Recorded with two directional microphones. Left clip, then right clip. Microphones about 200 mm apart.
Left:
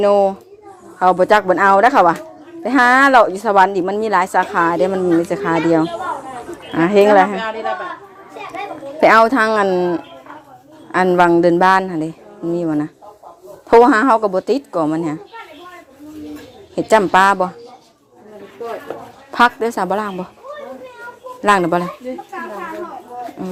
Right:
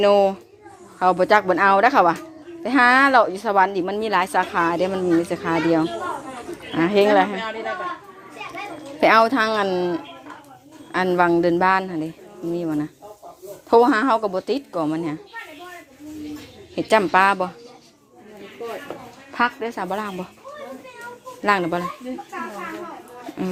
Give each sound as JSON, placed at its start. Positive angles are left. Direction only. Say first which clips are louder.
{"t": 0.0, "sound": "a woman's voice", "louder": "left 3 dB", "side_deg": 5}
{"t": 9.0, "sound": "a woman's voice", "louder": "left 5 dB", "side_deg": 15}
{"t": 16.7, "sound": "a woman's voice", "louder": "left 5 dB", "side_deg": 15}
{"t": 19.3, "sound": "a woman's voice", "louder": "left 8 dB", "side_deg": 35}
{"t": 21.4, "sound": "a woman's voice", "louder": "left 6 dB", "side_deg": 20}